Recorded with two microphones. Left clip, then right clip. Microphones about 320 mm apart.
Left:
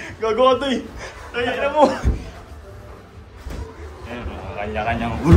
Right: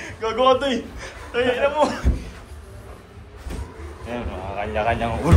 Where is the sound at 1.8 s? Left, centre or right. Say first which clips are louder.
Left 5 dB; left.